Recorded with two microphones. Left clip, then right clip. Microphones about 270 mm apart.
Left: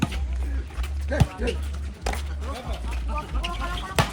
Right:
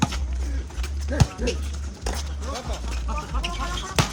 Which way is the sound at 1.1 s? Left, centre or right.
Centre.